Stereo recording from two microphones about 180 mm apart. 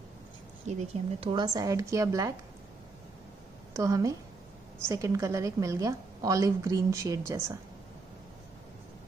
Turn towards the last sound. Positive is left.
turn(degrees=-15)  # may be behind; listen again after turning